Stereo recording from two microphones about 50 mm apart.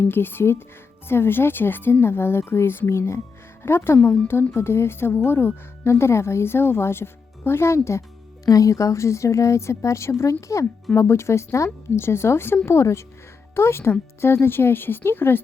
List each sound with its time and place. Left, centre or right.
0.0 s speech: left
3.6 s speech: left
4.5 s a woman's voice: left
8.6 s speech: left
10.9 s speech: left
12.0 s a woman's voice: left
12.6 s a woman's voice: left